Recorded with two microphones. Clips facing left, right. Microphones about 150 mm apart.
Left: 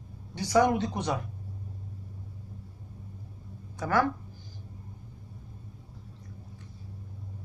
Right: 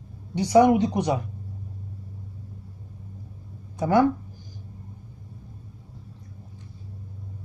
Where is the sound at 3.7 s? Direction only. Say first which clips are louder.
Right 7 dB; 20° right (ahead or behind).